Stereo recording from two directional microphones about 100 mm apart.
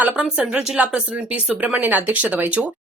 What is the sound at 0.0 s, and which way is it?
Speech, 15° right (ahead or behind).